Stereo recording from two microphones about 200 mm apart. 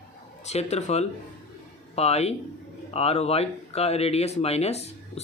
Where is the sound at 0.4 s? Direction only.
35° left (ahead or behind).